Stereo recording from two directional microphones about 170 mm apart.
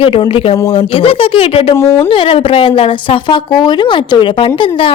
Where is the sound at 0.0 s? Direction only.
30° left (ahead or behind).